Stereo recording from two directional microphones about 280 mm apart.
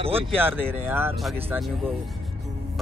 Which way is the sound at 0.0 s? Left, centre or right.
Centre.